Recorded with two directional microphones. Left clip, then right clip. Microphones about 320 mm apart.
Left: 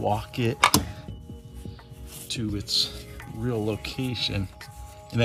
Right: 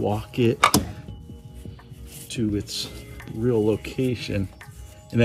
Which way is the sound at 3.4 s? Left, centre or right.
Left.